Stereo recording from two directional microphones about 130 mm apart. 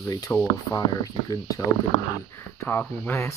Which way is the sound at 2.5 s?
15° left (ahead or behind).